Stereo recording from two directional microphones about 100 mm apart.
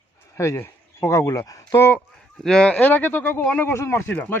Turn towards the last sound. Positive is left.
turn(degrees=20)  # may be behind; listen again after turning